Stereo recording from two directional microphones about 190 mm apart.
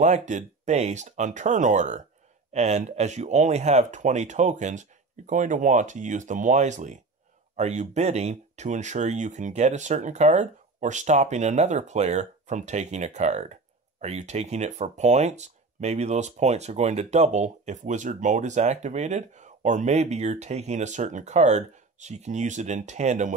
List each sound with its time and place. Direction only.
0.0 s speech: 40° right (ahead or behind)